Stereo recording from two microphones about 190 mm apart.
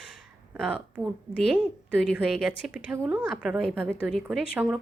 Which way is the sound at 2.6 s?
5° right (ahead or behind).